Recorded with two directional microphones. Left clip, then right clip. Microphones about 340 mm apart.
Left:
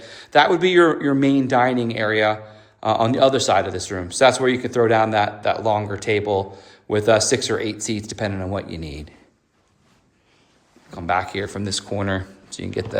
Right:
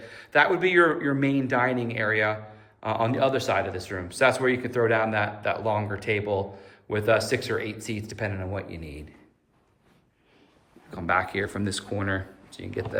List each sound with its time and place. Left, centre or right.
0.0 s speech: centre
10.9 s speech: centre